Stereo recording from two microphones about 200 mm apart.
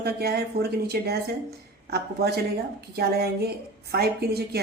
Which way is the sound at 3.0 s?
50° right (ahead or behind).